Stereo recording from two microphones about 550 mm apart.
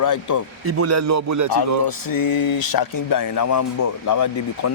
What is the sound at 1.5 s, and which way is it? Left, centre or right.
Speech, left.